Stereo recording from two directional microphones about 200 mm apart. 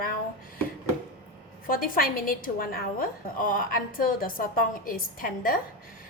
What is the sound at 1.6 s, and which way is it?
A woman's voice, 45° left (ahead or behind).